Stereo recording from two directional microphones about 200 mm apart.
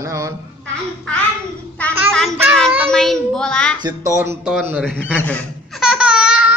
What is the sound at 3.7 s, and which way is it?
Speech, 20° right (ahead or behind).